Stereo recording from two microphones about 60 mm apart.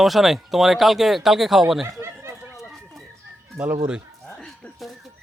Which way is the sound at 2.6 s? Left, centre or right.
Centre.